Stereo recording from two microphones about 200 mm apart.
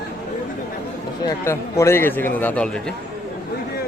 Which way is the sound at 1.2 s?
15° left (ahead or behind).